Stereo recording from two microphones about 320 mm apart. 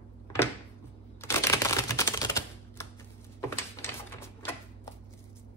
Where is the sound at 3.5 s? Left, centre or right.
Centre.